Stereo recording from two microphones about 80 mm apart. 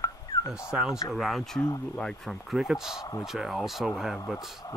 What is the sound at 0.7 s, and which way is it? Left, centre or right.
Speech, centre.